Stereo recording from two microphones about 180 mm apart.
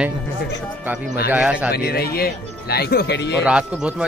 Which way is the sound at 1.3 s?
5° right (ahead or behind).